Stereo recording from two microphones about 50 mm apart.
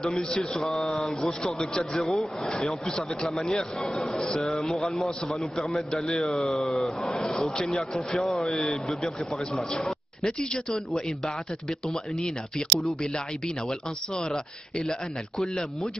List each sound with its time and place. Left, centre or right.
0.1 s a man's voice: centre
0.6 s a man's voice: centre
7.6 s a man's voice: centre
8.6 s a man's voice: centre